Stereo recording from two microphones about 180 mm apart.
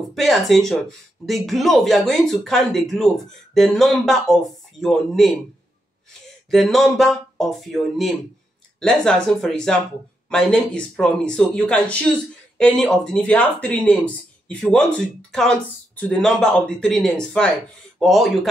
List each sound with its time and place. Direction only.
0.1 s speech: centre (ahead or behind)
6.5 s speech: centre (ahead or behind)